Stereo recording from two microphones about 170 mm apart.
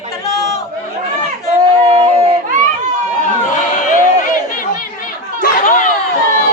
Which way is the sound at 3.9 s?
50° left (ahead or behind).